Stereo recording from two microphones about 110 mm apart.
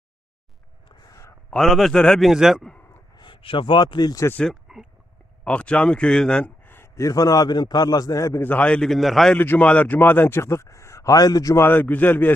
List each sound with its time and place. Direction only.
1.0 s a sound: 30° left (ahead or behind)
1.5 s a man's voice: 5° left (ahead or behind)
3.2 s a man's voice: 50° left (ahead or behind)
4.4 s speech: 5° right (ahead or behind)
5.5 s speech: 10° left (ahead or behind)
6.7 s a man's voice: 20° left (ahead or behind)
8.4 s a man's voice: 10° left (ahead or behind)
9.3 s speech: 15° left (ahead or behind); by 11.6 s 35° left (ahead or behind)
11.6 s speech: 15° left (ahead or behind)